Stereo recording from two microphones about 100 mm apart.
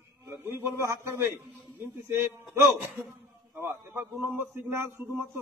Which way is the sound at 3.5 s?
25° right (ahead or behind).